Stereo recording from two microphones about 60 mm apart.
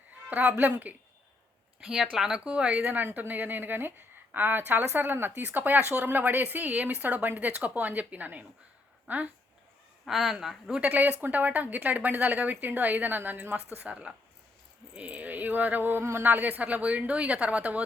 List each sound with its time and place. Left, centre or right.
0.3 s speech: right
1.8 s a woman's voice: centre; by 9.3 s right
10.1 s speech: centre
10.8 s speech: right
13.7 s speech: right